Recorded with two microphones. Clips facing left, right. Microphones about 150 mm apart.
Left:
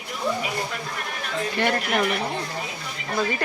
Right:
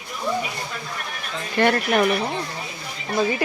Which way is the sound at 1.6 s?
50° right (ahead or behind).